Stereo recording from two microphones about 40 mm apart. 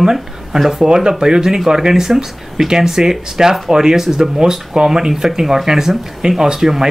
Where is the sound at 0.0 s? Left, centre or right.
Centre.